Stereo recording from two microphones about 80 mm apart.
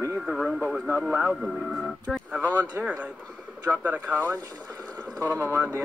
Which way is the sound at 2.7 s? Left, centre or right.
Centre.